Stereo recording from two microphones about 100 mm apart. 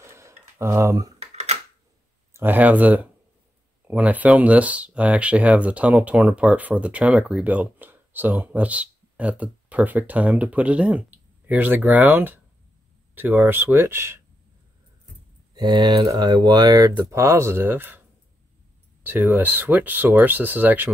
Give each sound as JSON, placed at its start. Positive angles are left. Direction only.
{"t": 0.0, "sound": "tick-tock", "side_deg": -25}
{"t": 1.2, "sound": "computer keyboard", "side_deg": -90}
{"t": 2.3, "sound": "speech", "side_deg": -20}
{"t": 15.5, "sound": "speech", "side_deg": -45}
{"t": 17.1, "sound": "speech", "side_deg": -30}
{"t": 19.0, "sound": "speech", "side_deg": -20}